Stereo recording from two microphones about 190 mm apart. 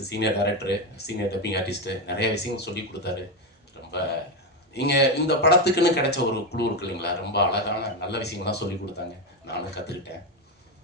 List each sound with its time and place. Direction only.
0.1 s speech: 60° left (ahead or behind)
4.7 s speech: 60° left (ahead or behind)